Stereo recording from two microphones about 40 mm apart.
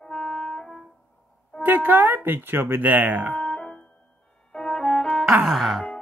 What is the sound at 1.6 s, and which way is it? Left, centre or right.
A woman's voice, right.